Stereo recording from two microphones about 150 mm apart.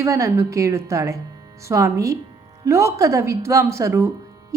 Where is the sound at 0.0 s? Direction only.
20° right (ahead or behind).